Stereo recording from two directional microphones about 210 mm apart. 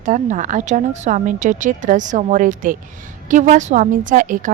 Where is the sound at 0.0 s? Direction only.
35° right (ahead or behind).